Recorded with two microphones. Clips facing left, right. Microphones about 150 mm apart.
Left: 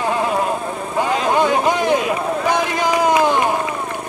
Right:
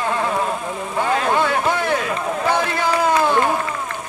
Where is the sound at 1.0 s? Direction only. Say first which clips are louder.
Left 2 dB; 15° left (ahead or behind).